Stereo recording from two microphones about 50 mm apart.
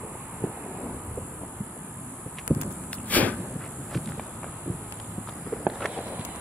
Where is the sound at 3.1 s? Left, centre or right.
Left.